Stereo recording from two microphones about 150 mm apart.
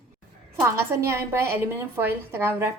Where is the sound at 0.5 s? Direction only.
15° right (ahead or behind).